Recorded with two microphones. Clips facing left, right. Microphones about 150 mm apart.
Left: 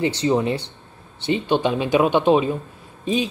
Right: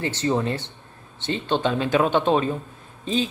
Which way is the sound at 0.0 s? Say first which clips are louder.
Left 4 dB; 15° left (ahead or behind).